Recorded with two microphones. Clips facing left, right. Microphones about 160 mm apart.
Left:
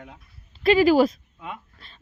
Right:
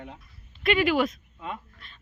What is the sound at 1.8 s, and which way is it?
Speech, 30° left (ahead or behind).